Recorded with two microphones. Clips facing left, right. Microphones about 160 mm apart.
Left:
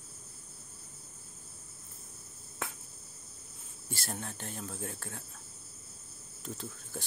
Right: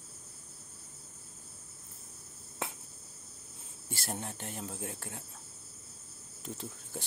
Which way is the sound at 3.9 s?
20° right (ahead or behind).